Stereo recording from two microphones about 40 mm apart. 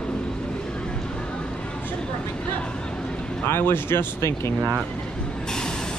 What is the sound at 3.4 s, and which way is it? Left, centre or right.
Speech, left.